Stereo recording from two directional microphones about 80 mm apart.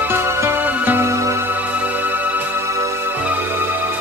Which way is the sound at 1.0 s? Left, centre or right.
Right.